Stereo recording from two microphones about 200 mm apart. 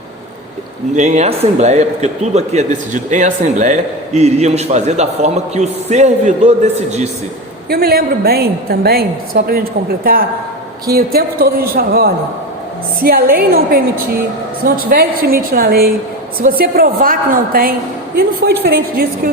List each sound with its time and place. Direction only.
0.9 s speech: 35° right (ahead or behind)
7.7 s a woman's voice: 50° right (ahead or behind)